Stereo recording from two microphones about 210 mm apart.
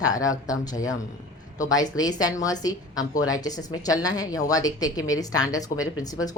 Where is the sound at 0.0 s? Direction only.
15° left (ahead or behind).